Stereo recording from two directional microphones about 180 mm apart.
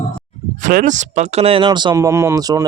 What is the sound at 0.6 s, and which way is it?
Speech, 45° right (ahead or behind).